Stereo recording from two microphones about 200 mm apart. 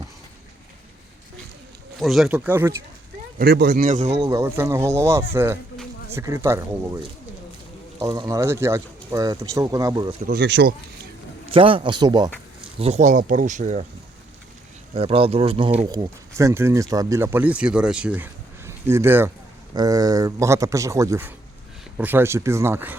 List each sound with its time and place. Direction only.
2.0 s speech: centre (ahead or behind)
3.3 s speech: 50° right (ahead or behind)
4.2 s speech: 15° right (ahead or behind)
10.2 s speech: 55° right (ahead or behind)
11.5 s speech: 25° right (ahead or behind)
12.8 s speech: 35° right (ahead or behind)
14.9 s speech: 25° right (ahead or behind)
15.9 s speech: 15° right (ahead or behind)